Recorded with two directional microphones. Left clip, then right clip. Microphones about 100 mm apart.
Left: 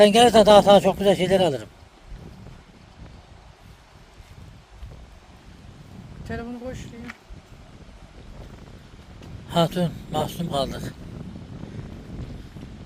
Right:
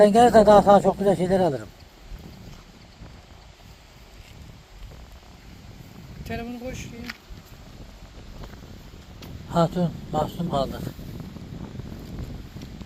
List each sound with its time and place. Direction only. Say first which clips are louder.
0.1 s speech: left 1 dB; 55° left (ahead or behind)
6.2 s speech: even; 5° right (ahead or behind)
9.5 s speech: left 1 dB; 60° left (ahead or behind)